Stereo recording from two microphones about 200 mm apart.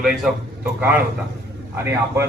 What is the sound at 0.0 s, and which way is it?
A man's voice, centre (ahead or behind).